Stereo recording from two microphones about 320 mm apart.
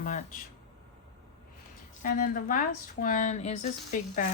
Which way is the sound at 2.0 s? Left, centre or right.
Left.